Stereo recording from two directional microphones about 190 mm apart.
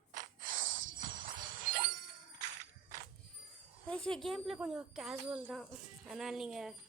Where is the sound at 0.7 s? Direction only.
90° right.